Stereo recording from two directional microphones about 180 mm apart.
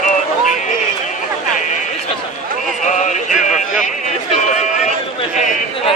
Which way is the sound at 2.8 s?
45° left (ahead or behind).